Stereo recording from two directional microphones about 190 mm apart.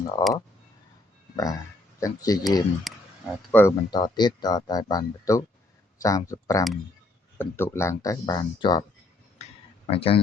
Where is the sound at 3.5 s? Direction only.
10° left (ahead or behind).